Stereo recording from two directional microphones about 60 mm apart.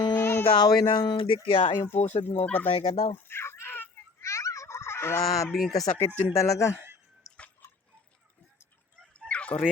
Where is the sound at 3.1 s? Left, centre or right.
Left.